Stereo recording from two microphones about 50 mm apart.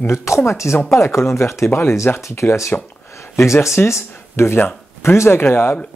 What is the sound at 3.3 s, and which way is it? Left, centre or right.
Speech, left.